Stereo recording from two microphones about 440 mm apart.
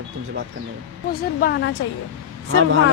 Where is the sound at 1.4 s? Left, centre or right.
Centre.